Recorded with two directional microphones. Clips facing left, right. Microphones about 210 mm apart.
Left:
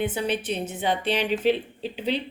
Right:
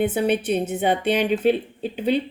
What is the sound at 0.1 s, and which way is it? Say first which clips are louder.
A woman's voice: right 6 dB; 55° right (ahead or behind).